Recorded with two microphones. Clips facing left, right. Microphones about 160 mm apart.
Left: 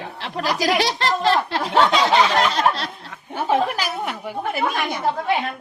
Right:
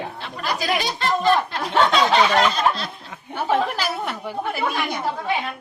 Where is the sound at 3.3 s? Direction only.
15° left (ahead or behind).